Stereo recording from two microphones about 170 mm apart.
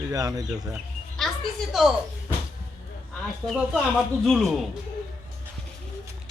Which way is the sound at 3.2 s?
Centre (ahead or behind).